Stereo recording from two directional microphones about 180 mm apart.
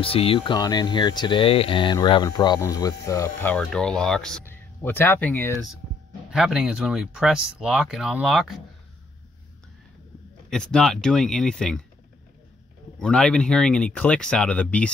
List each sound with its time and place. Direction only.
0.0 s speech: 30° left (ahead or behind); by 5.6 s 15° left (ahead or behind)
6.3 s speech: 5° right (ahead or behind)
10.5 s speech: 5° left (ahead or behind)
13.0 s speech: 5° left (ahead or behind)